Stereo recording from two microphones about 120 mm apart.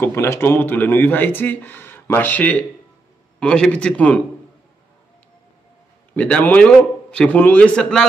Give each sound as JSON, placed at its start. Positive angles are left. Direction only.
{"t": 0.0, "sound": "a man's voice", "side_deg": 20}
{"t": 6.1, "sound": "a man's voice", "side_deg": 10}